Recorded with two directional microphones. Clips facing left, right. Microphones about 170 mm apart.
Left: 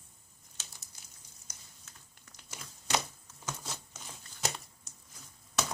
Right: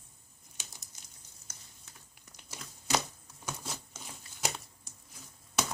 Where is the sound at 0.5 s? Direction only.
15° right (ahead or behind).